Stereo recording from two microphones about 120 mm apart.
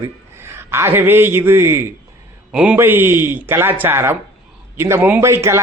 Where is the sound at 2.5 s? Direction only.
10° right (ahead or behind).